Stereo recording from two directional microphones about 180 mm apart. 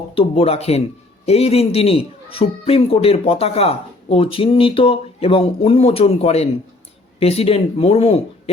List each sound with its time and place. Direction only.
0.2 s a man's voice: 30° left (ahead or behind)